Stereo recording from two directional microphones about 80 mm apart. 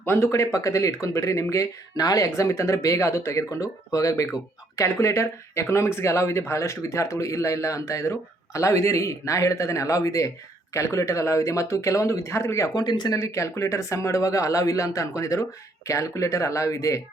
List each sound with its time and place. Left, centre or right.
0.0 s speech: left
12.7 s speech: left
13.1 s speech: left